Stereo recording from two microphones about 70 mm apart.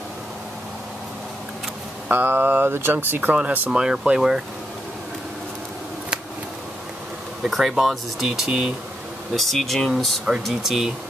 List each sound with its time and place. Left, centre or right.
2.0 s speech: right
3.7 s speech: centre
7.4 s speech: centre
9.3 s speech: centre